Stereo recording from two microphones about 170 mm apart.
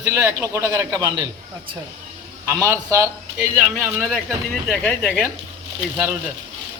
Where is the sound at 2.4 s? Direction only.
15° right (ahead or behind).